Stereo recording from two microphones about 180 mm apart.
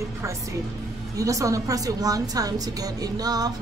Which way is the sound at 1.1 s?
20° right (ahead or behind).